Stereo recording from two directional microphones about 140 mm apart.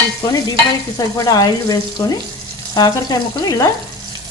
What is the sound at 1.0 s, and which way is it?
Speech, 25° left (ahead or behind).